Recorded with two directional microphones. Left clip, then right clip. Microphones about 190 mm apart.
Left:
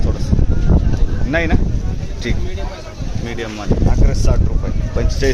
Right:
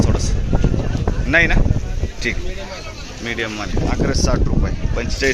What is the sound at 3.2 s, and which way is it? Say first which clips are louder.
Speech: even; 5° right (ahead or behind).